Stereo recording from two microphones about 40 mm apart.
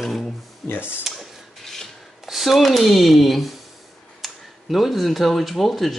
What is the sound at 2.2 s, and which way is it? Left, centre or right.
Speech, centre.